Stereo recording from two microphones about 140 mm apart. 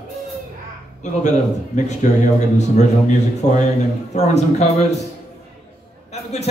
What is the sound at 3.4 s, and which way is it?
A man's voice, 55° left (ahead or behind).